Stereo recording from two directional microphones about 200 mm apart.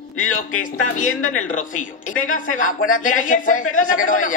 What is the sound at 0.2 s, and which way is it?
A man's voice, 40° left (ahead or behind).